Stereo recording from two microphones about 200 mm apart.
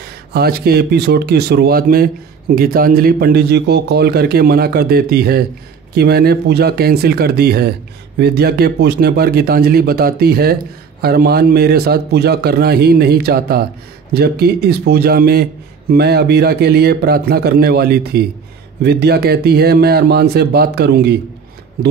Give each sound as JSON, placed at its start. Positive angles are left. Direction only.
{"t": 0.1, "sound": "speech", "side_deg": -50}